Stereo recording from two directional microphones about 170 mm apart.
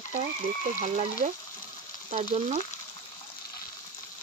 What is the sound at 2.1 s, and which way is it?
Frying, 35° right (ahead or behind).